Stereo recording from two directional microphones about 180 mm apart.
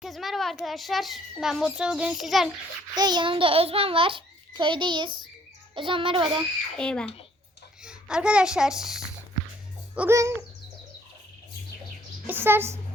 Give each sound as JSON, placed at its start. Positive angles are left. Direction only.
{"t": 0.0, "sound": "a child's voice", "side_deg": 0}
{"t": 2.9, "sound": "a child's voice", "side_deg": -25}
{"t": 6.7, "sound": "a child's voice", "side_deg": 5}
{"t": 12.2, "sound": "a woman's voice", "side_deg": -10}